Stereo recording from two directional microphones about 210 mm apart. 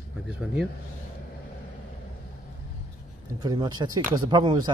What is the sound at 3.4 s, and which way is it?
Speech, 20° right (ahead or behind).